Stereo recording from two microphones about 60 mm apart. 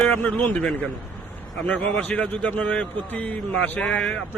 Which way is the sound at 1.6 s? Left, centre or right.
Left.